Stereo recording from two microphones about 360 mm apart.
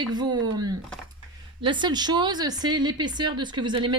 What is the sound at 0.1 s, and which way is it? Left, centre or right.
Speech, centre.